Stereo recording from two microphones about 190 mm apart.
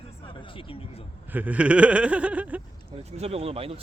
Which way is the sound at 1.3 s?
10° right (ahead or behind).